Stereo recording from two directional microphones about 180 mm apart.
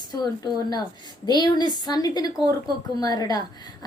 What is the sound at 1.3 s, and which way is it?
A woman's voice, 25° left (ahead or behind).